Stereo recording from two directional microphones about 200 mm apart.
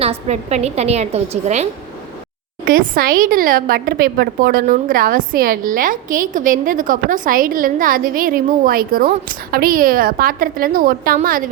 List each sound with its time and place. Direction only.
0.0 s a woman's voice: 30° right (ahead or behind)
2.6 s a woman's voice: 45° right (ahead or behind)